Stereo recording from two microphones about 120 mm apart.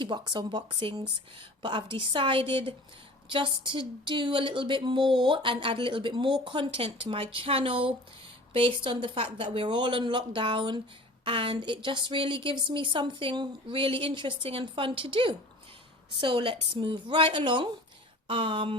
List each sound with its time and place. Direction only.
0.0 s speech: 40° right (ahead or behind)